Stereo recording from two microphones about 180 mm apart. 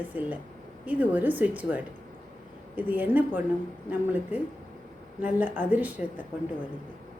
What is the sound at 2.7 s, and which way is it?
Speech, 10° right (ahead or behind).